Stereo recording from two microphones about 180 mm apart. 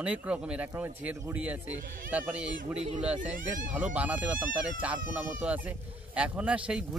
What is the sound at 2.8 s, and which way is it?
Speech, 40° right (ahead or behind).